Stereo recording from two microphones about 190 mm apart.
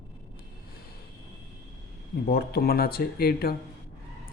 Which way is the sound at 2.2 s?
55° left (ahead or behind).